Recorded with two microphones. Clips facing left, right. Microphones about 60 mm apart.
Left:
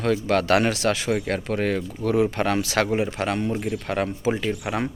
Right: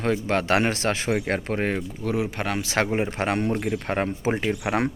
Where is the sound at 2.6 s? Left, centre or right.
Right.